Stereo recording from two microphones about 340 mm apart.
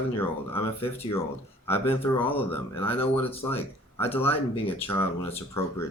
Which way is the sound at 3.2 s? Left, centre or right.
Centre.